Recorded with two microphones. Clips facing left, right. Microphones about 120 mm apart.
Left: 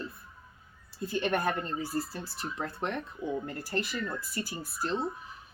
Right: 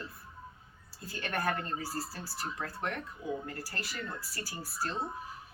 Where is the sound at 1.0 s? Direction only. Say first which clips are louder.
Left 5 dB; 20° left (ahead or behind).